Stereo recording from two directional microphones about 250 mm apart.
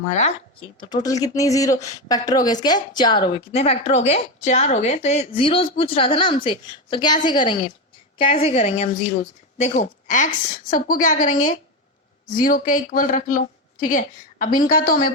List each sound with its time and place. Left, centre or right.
0.1 s a woman's voice: left